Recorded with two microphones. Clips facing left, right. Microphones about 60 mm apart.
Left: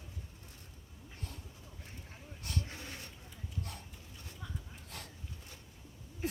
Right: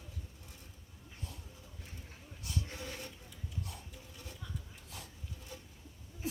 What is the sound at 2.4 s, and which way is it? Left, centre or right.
Snake, left.